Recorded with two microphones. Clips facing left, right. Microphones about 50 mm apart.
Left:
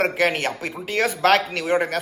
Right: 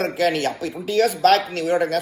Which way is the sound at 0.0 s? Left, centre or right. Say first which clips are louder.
Even; left.